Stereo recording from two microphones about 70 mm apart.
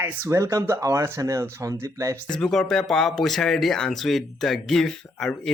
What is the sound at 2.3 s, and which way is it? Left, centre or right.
A man's voice, centre.